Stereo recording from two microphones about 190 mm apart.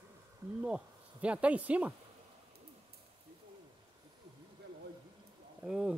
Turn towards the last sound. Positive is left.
turn(degrees=-5)  # may be behind; listen again after turning